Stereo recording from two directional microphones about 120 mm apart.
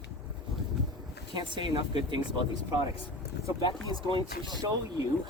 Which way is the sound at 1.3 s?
40° right (ahead or behind).